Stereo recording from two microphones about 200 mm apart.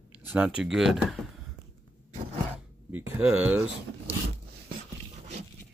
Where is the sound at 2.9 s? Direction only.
5° right (ahead or behind).